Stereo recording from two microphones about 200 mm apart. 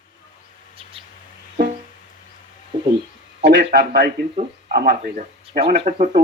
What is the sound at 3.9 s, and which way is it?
Speech, 50° right (ahead or behind).